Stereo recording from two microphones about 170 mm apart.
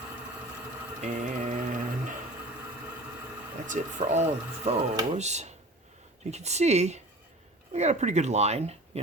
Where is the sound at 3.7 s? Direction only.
45° right (ahead or behind).